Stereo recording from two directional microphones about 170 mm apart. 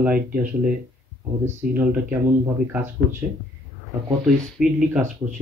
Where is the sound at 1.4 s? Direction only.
10° right (ahead or behind).